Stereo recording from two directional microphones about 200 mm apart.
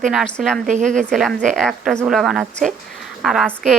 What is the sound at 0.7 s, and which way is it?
Speech, 40° right (ahead or behind).